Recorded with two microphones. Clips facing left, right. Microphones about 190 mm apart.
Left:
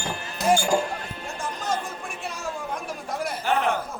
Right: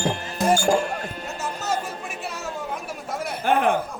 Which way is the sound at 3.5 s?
55° right (ahead or behind).